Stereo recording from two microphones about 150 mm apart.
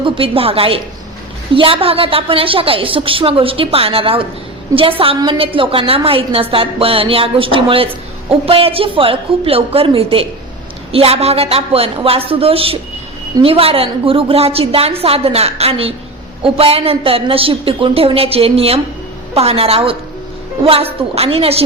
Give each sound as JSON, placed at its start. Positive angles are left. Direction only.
{"t": 0.0, "sound": "a woman's voice", "side_deg": -40}